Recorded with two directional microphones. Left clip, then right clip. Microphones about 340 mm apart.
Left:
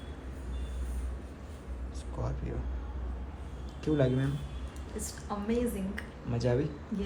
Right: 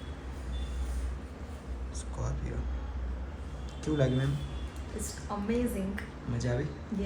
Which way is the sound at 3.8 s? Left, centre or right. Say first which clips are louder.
Left 1 dB; centre.